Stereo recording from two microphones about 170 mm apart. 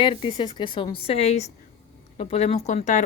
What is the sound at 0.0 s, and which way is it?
A woman's voice, 30° left (ahead or behind).